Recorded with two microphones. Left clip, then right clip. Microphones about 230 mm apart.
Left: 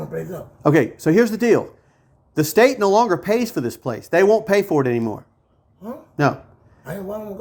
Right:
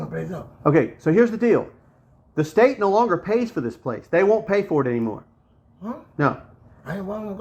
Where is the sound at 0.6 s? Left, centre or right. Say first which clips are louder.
Left 2 dB; left.